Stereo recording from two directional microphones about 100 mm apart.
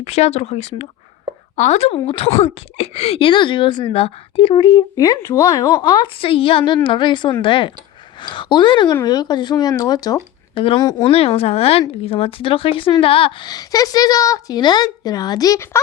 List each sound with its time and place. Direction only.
0.0 s speech: 90° left
1.8 s speech: 80° left; by 4.8 s 55° left (ahead or behind)
4.9 s a woman's voice: 35° left (ahead or behind); by 9.0 s 55° left (ahead or behind)
9.0 s a woman's voice: 45° left (ahead or behind)
10.5 s speech: 65° left (ahead or behind)
10.8 s a woman's voice: 35° left (ahead or behind)
11.1 s speech: 80° left; by 13.5 s 65° left (ahead or behind)
13.5 s a woman's voice: 40° left (ahead or behind)